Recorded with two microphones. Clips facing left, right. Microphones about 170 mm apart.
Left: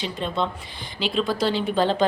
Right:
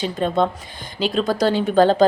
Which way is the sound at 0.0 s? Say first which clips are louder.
Right 6 dB; 45° right (ahead or behind).